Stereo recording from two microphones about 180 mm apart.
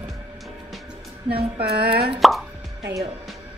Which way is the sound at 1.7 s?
60° right (ahead or behind).